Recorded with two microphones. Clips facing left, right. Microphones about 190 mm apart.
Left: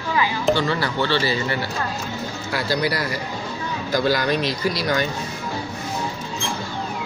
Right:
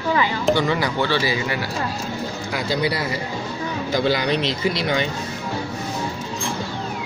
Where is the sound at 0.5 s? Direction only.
15° right (ahead or behind).